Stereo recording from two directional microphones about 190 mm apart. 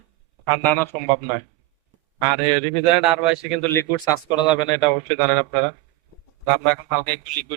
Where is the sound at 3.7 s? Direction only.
15° left (ahead or behind).